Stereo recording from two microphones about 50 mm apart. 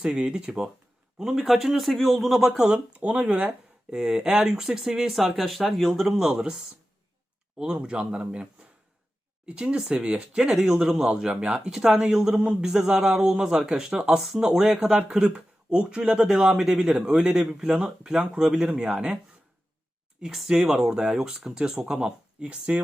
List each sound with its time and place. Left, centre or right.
0.0 s a man's voice: centre
2.7 s a man's voice: right
7.6 s speech: centre
9.5 s a man's voice: centre
14.2 s speech: centre
14.6 s a man's voice: centre
20.2 s a man's voice: centre